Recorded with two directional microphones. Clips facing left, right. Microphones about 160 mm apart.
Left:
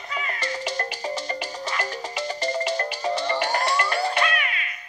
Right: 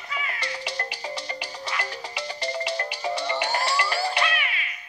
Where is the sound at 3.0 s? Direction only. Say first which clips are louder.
Left 1 dB; 15° right (ahead or behind).